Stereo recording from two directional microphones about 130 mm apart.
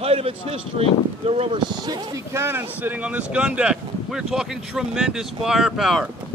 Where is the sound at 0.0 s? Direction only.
45° right (ahead or behind).